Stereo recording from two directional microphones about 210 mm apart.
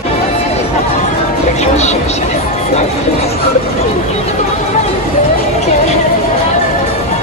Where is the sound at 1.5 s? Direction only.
30° left (ahead or behind).